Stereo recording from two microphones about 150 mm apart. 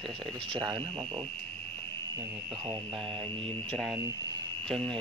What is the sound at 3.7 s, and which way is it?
Speech, 5° left (ahead or behind).